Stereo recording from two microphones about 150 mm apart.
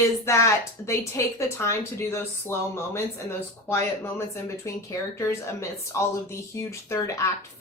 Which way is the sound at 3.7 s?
20° left (ahead or behind).